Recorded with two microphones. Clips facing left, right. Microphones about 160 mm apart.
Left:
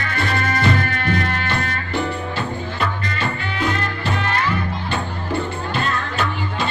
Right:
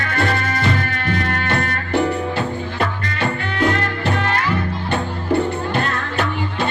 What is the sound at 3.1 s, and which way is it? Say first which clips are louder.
Music: right 3 dB; 60° right (ahead or behind).